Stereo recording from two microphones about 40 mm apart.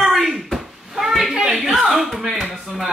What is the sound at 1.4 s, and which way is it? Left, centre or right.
Speech, centre.